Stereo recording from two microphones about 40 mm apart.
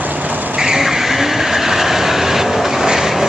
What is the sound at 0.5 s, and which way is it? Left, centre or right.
Vehicle, centre.